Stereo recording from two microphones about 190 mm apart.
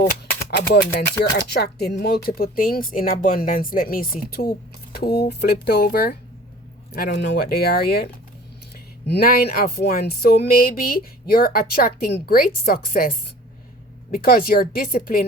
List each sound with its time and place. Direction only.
0.5 s speech: 60° left (ahead or behind)